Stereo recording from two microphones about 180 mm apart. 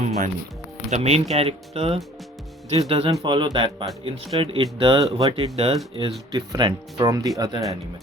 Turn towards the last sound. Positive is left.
turn(degrees=-20)  # may be behind; listen again after turning